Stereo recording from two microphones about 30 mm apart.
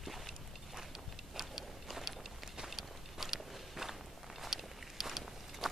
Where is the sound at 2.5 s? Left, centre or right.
Centre.